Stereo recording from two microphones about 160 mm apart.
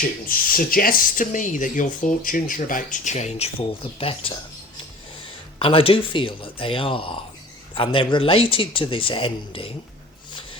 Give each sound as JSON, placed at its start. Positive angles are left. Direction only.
{"t": 0.3, "sound": "speech", "side_deg": 65}
{"t": 5.5, "sound": "speech", "side_deg": 35}